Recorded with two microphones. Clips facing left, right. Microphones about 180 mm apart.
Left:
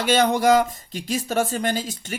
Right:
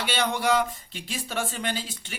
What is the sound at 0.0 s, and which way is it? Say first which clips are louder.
Speech: left 8 dB; 45° left (ahead or behind).